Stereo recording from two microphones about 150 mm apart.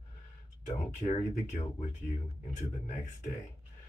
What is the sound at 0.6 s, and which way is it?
Speech, 50° left (ahead or behind).